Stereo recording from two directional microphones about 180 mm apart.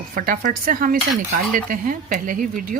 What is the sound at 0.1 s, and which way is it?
Speech, 50° right (ahead or behind).